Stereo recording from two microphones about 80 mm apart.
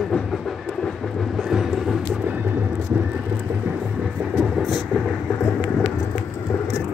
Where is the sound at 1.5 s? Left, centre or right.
Centre.